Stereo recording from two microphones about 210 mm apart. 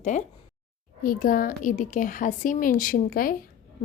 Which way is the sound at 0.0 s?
35° left (ahead or behind).